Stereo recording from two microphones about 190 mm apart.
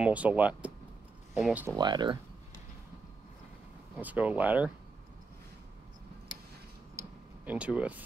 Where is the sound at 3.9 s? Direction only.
10° right (ahead or behind).